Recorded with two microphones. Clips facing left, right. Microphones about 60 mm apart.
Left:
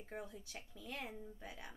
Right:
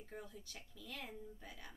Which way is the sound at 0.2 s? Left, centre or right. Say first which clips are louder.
Left 3 dB; left.